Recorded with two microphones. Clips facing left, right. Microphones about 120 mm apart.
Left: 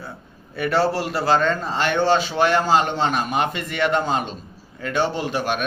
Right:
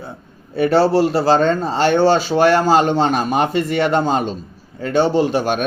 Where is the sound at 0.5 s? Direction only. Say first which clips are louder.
Right 7 dB; 30° right (ahead or behind).